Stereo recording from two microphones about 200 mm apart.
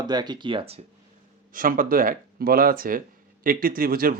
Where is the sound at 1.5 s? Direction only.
45° right (ahead or behind).